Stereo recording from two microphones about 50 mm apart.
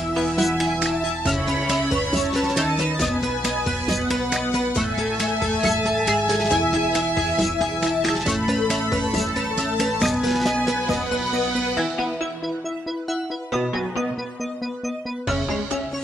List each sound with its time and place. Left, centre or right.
0.1 s music: centre